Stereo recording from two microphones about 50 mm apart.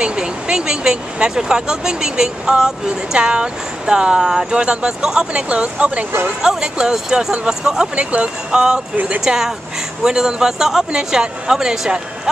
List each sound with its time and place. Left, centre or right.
0.0 s speech: centre
7.9 s speech: right; by 11.9 s centre